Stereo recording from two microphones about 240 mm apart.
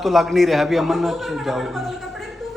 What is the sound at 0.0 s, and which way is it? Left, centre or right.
A man's voice, centre.